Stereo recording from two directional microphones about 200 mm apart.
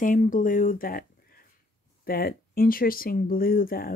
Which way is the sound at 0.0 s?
40° left (ahead or behind).